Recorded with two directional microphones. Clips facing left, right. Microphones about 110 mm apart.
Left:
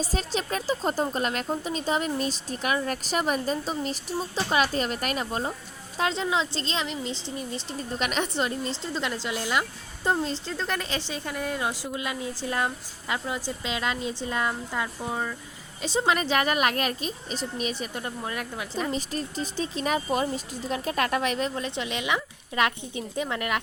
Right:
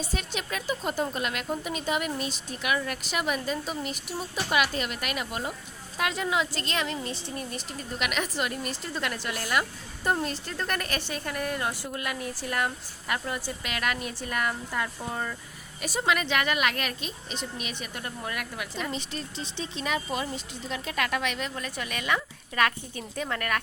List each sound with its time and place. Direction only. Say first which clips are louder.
0.0 s a woman's voice: left 4 dB; 35° left (ahead or behind); by 13.4 s 15° left (ahead or behind)
13.7 s a woman's voice: left 2 dB; 25° left (ahead or behind)
15.8 s speech: left 2 dB; 25° left (ahead or behind)
18.8 s speech: left 6 dB; 40° left (ahead or behind); by 23.6 s 15° left (ahead or behind)